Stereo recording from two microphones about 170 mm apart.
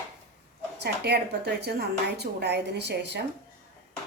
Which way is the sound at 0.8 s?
75° right (ahead or behind).